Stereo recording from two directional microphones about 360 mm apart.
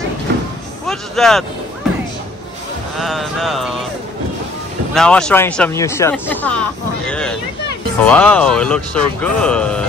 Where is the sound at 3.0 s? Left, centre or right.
Centre.